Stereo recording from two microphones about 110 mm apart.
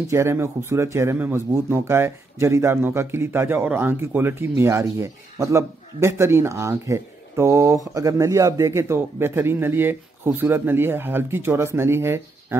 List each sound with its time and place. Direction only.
0.1 s speech: 25° right (ahead or behind)